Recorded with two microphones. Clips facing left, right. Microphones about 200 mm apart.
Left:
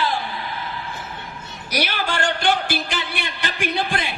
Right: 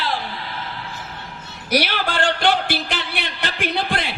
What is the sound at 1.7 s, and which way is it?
Speech, 55° right (ahead or behind).